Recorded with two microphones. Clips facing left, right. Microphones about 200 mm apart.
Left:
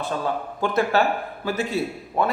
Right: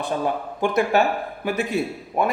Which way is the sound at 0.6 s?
15° right (ahead or behind).